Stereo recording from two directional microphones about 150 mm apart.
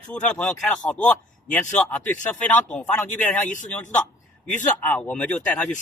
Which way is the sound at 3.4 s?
55° left (ahead or behind).